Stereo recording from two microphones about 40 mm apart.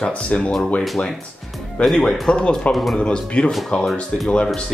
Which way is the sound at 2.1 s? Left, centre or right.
Centre.